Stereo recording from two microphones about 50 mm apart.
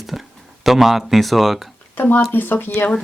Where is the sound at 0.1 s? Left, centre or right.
Centre.